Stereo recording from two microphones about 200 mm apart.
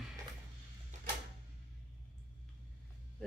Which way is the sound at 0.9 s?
40° right (ahead or behind).